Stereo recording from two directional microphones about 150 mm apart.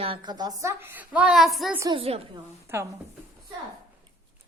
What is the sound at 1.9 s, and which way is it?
Speech, 40° right (ahead or behind).